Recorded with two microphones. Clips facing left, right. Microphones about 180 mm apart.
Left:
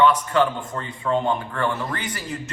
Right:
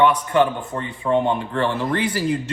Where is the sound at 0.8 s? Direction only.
25° right (ahead or behind).